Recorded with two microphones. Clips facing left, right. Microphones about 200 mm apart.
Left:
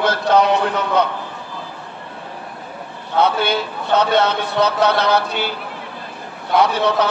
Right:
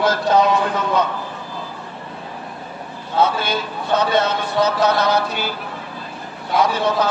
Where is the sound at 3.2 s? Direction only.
65° left (ahead or behind).